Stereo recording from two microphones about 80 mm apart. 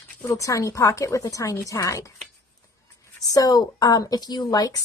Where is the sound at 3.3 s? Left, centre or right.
Left.